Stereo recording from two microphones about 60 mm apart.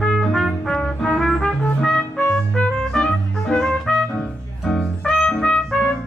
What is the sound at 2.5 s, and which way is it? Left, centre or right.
Music, centre.